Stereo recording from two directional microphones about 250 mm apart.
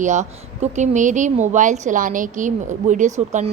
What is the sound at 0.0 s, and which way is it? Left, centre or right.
A woman's voice, right.